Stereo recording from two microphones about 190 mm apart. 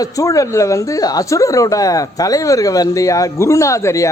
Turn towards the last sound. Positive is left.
turn(degrees=15)  # may be behind; listen again after turning